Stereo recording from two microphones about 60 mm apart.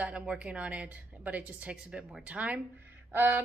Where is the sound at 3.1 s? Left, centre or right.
Right.